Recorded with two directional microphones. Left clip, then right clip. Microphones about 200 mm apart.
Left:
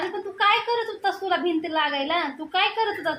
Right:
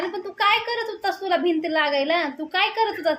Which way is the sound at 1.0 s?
45° right (ahead or behind).